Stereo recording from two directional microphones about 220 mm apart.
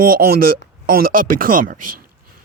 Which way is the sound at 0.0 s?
40° right (ahead or behind).